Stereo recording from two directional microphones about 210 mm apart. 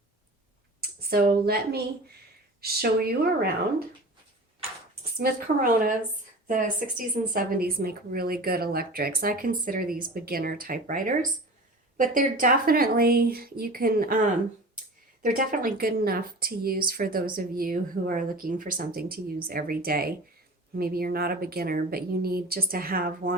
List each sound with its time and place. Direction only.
0.8 s speech: 45° right (ahead or behind)
5.1 s speech: 45° right (ahead or behind)